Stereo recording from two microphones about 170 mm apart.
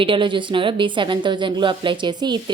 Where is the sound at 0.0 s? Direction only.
30° right (ahead or behind).